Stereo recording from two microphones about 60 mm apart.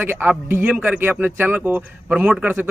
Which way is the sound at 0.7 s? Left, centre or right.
Centre.